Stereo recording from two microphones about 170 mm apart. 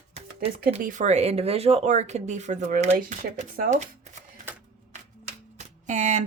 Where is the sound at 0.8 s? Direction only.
50° right (ahead or behind).